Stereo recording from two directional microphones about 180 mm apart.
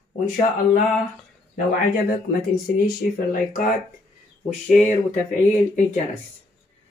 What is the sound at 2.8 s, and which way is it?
Speech, 50° left (ahead or behind).